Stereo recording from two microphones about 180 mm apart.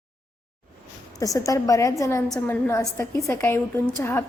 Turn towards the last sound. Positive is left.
turn(degrees=15)  # may be behind; listen again after turning